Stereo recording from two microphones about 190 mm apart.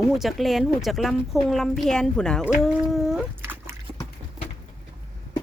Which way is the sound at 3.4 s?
15° right (ahead or behind).